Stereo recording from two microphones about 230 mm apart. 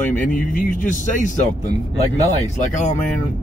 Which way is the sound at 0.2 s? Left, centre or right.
Left.